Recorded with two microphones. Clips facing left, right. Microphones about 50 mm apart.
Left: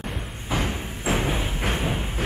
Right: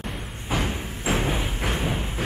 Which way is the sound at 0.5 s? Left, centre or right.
Centre.